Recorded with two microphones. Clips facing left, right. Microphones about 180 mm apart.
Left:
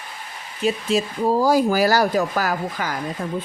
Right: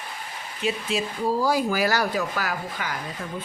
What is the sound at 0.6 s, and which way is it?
Speech, 40° left (ahead or behind).